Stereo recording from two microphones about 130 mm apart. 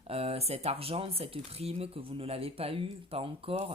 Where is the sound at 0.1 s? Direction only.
50° right (ahead or behind).